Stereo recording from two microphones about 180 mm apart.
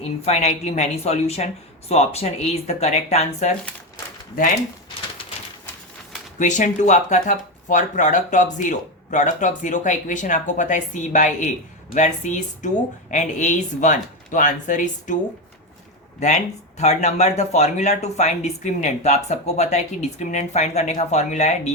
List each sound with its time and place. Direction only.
0.3 s speech: 35° left (ahead or behind)
6.4 s a woman's voice: 45° left (ahead or behind)
16.2 s speech: 40° left (ahead or behind)